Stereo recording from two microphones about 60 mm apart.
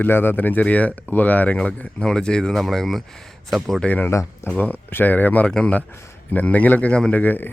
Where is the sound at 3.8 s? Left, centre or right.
Left.